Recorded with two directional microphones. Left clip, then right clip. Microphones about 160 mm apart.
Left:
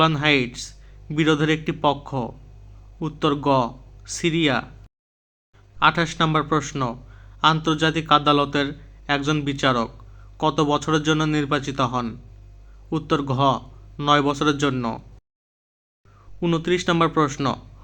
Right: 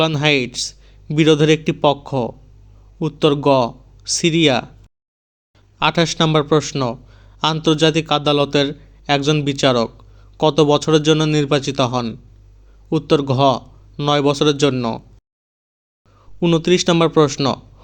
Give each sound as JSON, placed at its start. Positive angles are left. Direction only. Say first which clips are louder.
{"t": 0.0, "sound": "a man's voice", "louder": "right 2 dB", "side_deg": -35}
{"t": 5.8, "sound": "a man's voice", "louder": "right 2 dB", "side_deg": -35}
{"t": 16.4, "sound": "a man's voice", "louder": "right 7 dB", "side_deg": -35}